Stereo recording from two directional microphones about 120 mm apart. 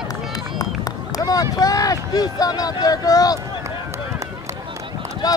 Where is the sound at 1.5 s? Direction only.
30° left (ahead or behind).